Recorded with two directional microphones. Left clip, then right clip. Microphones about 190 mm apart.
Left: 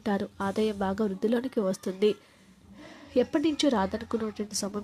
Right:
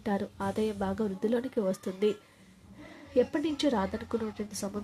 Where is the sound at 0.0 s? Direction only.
25° left (ahead or behind).